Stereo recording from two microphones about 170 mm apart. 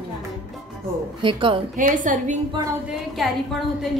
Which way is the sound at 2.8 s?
Centre (ahead or behind).